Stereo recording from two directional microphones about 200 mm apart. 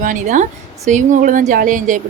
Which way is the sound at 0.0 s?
40° right (ahead or behind).